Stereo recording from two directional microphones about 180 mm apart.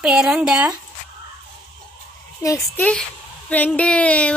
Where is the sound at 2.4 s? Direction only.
20° left (ahead or behind).